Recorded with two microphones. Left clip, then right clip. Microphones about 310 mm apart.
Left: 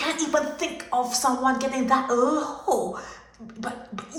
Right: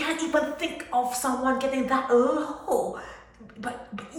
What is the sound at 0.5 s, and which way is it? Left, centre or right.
A woman's voice, centre.